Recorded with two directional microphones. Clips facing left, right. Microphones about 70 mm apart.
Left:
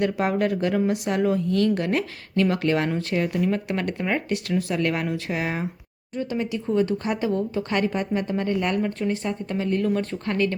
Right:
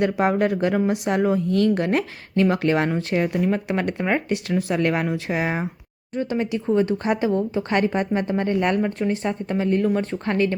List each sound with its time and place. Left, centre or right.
0.0 s speech: right
6.1 s a woman's voice: right